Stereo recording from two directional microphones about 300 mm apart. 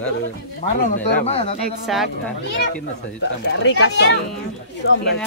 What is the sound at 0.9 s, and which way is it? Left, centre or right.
Speech, left.